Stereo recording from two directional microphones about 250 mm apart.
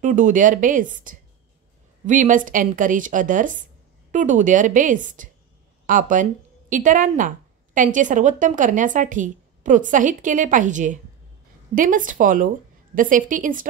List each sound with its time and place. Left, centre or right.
0.0 s a woman's voice: right